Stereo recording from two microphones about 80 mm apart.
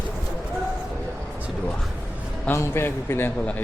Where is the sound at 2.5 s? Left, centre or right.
Left.